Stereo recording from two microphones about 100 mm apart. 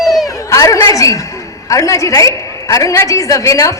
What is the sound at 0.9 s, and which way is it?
A man's voice, 35° left (ahead or behind).